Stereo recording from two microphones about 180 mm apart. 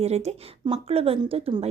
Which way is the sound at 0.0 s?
35° right (ahead or behind).